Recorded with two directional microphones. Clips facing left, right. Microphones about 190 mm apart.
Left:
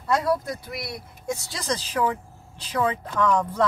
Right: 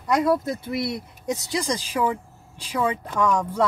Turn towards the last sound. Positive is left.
turn(degrees=-10)  # may be behind; listen again after turning